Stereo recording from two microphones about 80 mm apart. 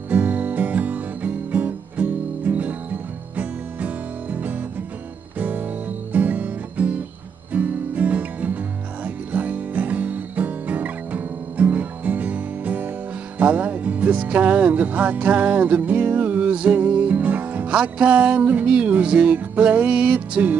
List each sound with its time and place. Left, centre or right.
0.1 s music: centre